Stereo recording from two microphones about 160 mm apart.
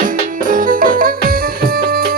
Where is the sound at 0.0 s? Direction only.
60° right (ahead or behind).